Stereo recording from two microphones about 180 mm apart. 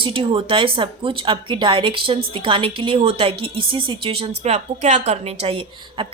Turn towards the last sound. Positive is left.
turn(degrees=-30)  # may be behind; listen again after turning